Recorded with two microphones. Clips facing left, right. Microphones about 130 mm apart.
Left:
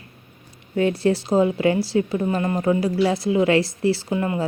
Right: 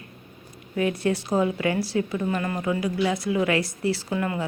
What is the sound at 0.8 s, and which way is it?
A woman's voice, 30° left (ahead or behind).